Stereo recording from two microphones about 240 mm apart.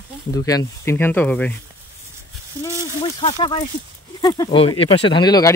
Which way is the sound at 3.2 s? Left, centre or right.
Left.